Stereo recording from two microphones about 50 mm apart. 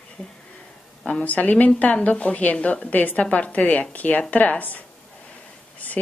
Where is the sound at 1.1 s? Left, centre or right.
Left.